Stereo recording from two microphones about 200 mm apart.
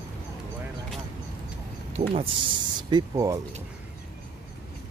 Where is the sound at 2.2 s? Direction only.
25° right (ahead or behind).